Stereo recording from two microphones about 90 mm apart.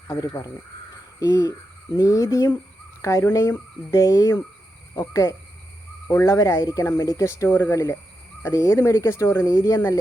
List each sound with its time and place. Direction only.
0.1 s speech: 40° left (ahead or behind)
6.1 s speech: 30° left (ahead or behind)